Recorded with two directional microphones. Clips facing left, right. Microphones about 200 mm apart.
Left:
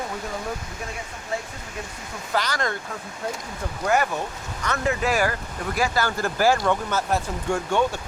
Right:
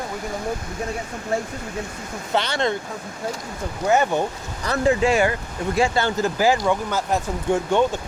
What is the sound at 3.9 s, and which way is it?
Speech, 30° right (ahead or behind).